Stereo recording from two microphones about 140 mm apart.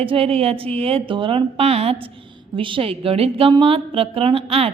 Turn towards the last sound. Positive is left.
turn(degrees=-45)  # may be behind; listen again after turning